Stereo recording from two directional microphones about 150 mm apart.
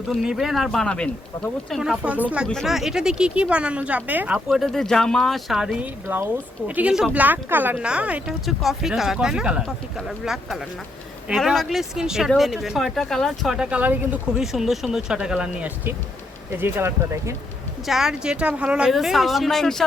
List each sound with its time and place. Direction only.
0.1 s speech: centre (ahead or behind)
1.8 s speech: 5° right (ahead or behind)
6.1 s speech: 10° right (ahead or behind)
17.8 s speech: 5° right (ahead or behind)